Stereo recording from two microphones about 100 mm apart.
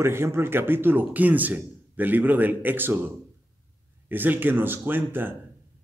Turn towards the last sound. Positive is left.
turn(degrees=-20)  # may be behind; listen again after turning